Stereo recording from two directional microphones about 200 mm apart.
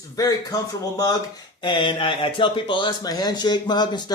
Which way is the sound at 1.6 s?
25° left (ahead or behind).